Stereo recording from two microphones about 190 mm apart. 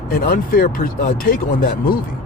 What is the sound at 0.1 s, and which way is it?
Speech, 50° left (ahead or behind).